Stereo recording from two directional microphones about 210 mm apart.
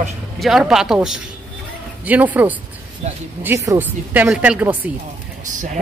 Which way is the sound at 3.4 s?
15° right (ahead or behind).